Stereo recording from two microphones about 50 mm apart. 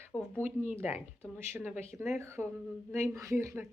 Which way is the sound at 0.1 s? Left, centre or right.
Left.